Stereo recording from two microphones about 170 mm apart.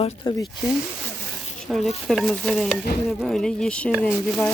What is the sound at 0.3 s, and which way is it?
Speech, 30° left (ahead or behind).